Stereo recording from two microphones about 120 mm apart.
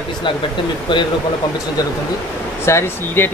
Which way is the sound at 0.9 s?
40° left (ahead or behind).